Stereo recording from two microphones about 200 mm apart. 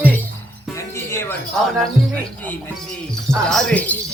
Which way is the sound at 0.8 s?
15° left (ahead or behind).